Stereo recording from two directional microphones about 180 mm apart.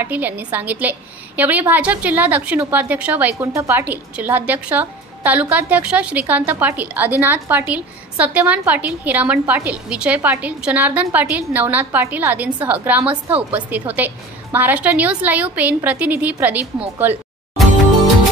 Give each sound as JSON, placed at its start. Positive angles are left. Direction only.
{"t": 0.0, "sound": "a woman's voice", "side_deg": -10}